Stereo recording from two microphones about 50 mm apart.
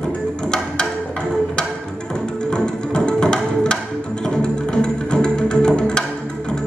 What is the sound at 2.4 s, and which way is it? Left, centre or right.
Music, centre.